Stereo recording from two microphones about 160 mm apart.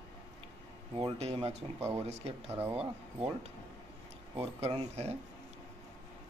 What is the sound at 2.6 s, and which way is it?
Speech, 10° right (ahead or behind).